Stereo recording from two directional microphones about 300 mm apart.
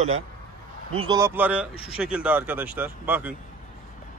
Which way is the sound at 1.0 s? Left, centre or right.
Centre.